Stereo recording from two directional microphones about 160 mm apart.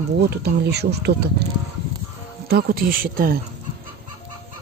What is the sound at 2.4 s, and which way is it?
Speech, 70° right (ahead or behind).